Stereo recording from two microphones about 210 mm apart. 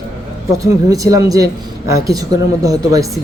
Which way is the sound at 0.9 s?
15° right (ahead or behind).